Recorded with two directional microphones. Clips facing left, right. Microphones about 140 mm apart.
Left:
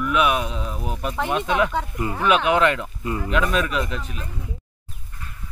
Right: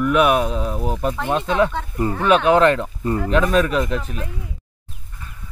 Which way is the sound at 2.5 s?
35° right (ahead or behind).